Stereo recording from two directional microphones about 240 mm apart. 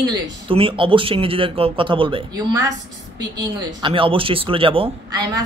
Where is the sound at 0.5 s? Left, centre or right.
Right.